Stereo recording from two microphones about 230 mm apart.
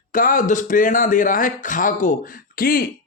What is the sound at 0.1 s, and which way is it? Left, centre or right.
Speech, left.